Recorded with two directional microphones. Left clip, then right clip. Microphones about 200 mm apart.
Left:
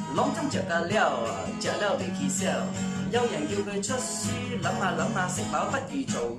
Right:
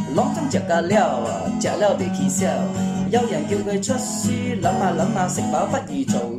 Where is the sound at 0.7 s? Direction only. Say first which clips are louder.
Right 8 dB; 30° right (ahead or behind).